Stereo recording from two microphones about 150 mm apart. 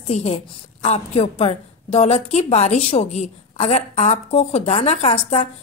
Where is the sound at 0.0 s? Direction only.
45° left (ahead or behind).